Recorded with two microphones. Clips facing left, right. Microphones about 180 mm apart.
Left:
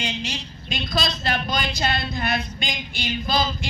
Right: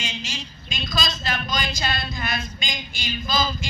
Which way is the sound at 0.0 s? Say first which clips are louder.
Left 4 dB; 60° left (ahead or behind).